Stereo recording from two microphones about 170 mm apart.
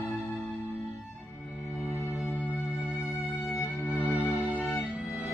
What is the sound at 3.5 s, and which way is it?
Music, 15° left (ahead or behind).